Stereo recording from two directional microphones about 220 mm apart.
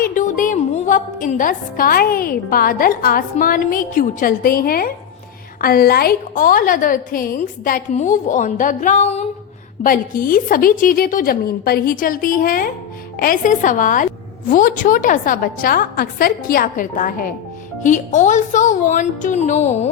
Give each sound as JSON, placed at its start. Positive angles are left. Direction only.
{"t": 0.0, "sound": "a woman's voice", "side_deg": 35}